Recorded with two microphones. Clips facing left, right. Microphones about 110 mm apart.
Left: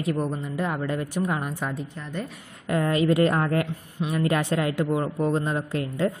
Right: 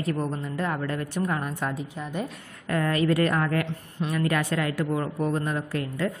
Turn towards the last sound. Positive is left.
turn(degrees=25)  # may be behind; listen again after turning